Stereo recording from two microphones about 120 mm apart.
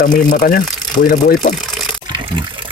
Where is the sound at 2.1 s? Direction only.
40° right (ahead or behind).